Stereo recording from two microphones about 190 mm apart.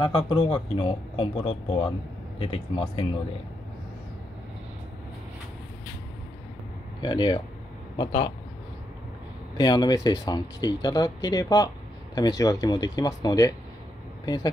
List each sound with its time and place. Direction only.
0.0 s speech: 25° left (ahead or behind)
7.0 s speech: 25° left (ahead or behind)
9.6 s speech: 20° left (ahead or behind)